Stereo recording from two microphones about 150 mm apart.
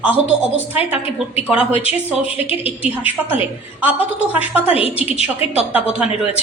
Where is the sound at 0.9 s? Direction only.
40° left (ahead or behind).